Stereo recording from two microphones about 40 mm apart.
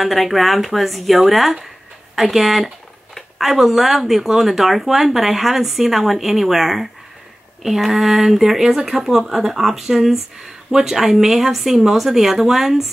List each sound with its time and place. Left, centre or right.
0.0 s speech: centre